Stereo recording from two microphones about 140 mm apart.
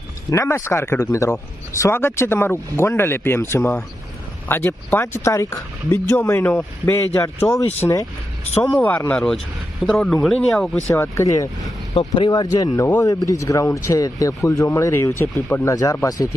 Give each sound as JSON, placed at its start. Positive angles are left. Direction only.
{"t": 0.3, "sound": "speech", "side_deg": 20}
{"t": 8.6, "sound": "speech", "side_deg": 5}
{"t": 10.9, "sound": "speech", "side_deg": 20}
{"t": 11.9, "sound": "speech", "side_deg": 35}